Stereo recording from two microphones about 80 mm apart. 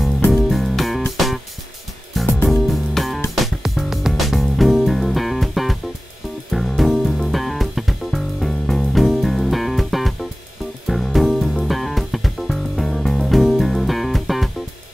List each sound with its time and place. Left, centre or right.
0.3 s music: centre
6.8 s music: centre